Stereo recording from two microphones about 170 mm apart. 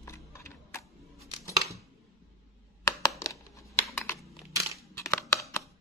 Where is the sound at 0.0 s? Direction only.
15° left (ahead or behind).